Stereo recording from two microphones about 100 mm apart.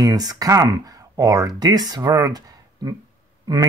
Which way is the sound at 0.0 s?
40° right (ahead or behind).